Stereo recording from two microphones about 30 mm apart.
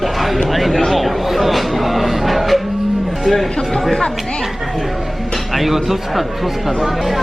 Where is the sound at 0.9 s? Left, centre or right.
Centre.